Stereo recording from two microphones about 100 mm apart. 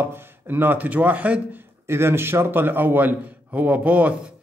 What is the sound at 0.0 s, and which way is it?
A man's voice, 20° right (ahead or behind).